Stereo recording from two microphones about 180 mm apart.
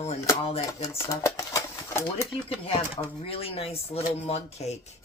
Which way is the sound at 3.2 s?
30° left (ahead or behind).